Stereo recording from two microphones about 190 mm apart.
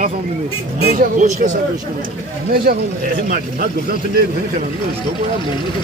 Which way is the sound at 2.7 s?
50° right (ahead or behind).